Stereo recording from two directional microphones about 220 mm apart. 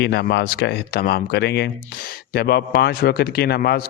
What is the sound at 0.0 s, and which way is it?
A man's voice, 50° left (ahead or behind).